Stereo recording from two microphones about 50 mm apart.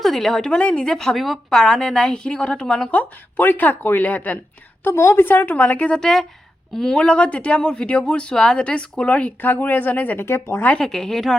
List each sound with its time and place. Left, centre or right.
0.0 s a woman's voice: centre
0.5 s a woman's voice: left
1.1 s a woman's voice: centre
2.9 s speech: left
4.9 s a woman's voice: left
5.2 s speech: left
5.9 s a woman's voice: centre
6.9 s speech: left
10.2 s speech: left
10.8 s a woman's voice: centre